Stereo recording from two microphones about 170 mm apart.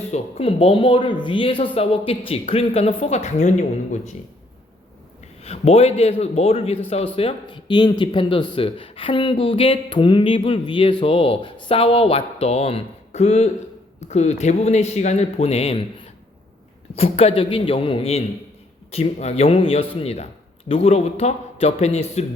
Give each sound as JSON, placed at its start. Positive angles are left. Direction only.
{"t": 0.1, "sound": "speech", "side_deg": 35}
{"t": 5.4, "sound": "speech", "side_deg": 35}